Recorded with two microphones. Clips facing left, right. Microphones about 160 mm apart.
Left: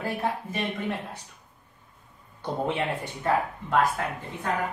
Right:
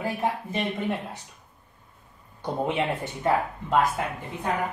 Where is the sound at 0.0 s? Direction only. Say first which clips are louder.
Right 1 dB; 20° right (ahead or behind).